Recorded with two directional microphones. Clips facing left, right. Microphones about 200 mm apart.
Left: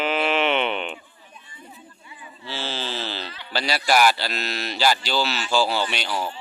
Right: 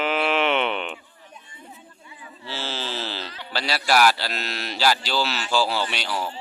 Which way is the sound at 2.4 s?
5° right (ahead or behind).